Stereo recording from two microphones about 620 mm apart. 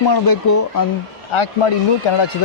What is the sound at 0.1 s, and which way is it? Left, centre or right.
Speech, left.